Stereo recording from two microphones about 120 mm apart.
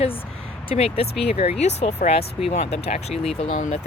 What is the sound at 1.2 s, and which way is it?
Speech, 55° left (ahead or behind).